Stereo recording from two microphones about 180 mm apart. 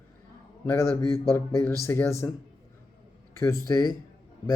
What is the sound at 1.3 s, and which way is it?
Speech, 15° left (ahead or behind).